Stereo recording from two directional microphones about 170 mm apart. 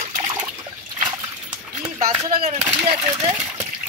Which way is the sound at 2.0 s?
55° right (ahead or behind).